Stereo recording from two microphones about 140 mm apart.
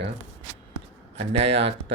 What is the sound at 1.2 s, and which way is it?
Speech, 45° right (ahead or behind).